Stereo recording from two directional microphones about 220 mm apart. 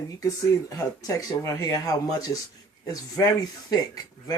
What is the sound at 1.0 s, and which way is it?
Speech, 15° left (ahead or behind).